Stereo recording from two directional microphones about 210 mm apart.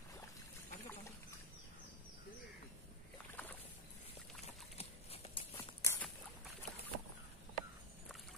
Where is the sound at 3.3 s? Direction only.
10° left (ahead or behind).